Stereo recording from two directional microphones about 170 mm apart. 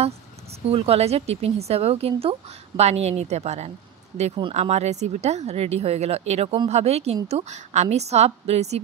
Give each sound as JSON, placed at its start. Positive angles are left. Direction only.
{"t": 0.7, "sound": "speech", "side_deg": -35}